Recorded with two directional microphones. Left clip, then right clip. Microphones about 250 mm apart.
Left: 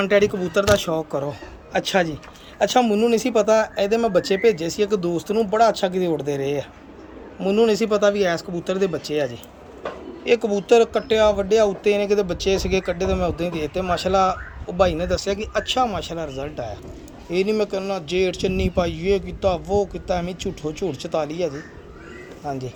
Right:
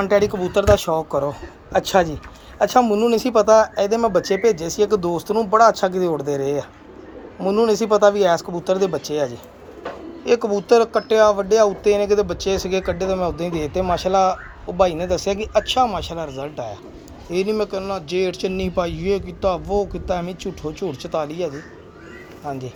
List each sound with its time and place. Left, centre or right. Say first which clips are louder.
0.1 s speech: right 1 dB; left
0.9 s speech: right 4 dB; right
1.7 s speech: right 3 dB; centre